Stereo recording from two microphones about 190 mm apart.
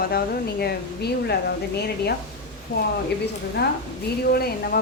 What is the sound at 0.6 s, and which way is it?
Speech, 60° left (ahead or behind).